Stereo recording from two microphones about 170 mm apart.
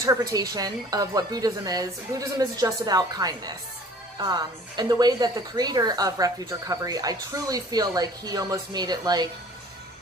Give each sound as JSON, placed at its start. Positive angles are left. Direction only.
{"t": 0.0, "sound": "speech", "side_deg": -20}